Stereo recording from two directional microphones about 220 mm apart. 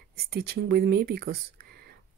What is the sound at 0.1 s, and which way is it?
Speech, 45° right (ahead or behind).